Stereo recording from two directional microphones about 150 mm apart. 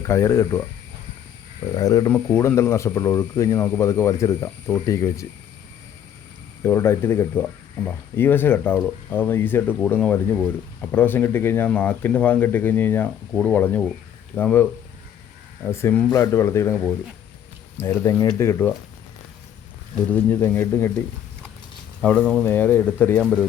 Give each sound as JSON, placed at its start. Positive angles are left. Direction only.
{"t": 0.0, "sound": "speech", "side_deg": 20}
{"t": 1.7, "sound": "speech", "side_deg": 25}
{"t": 6.6, "sound": "speech", "side_deg": 15}
{"t": 17.7, "sound": "speech", "side_deg": 15}
{"t": 20.1, "sound": "speech", "side_deg": 15}
{"t": 22.0, "sound": "speech", "side_deg": 10}